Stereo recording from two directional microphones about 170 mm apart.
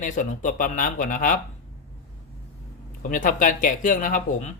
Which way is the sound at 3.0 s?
50° left (ahead or behind).